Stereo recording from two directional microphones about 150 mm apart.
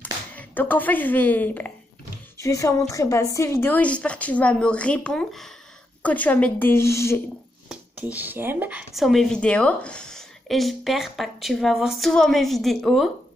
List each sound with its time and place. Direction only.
0.0 s a woman's voice: 10° left (ahead or behind)
7.6 s speech: 5° right (ahead or behind)